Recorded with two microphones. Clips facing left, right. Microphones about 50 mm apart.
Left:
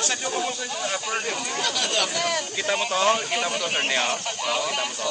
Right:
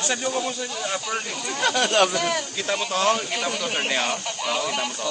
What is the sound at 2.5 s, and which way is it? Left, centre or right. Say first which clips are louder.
Speech: left 1 dB; centre.